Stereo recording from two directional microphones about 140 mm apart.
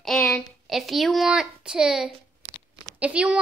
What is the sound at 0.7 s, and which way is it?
Child singing, centre (ahead or behind).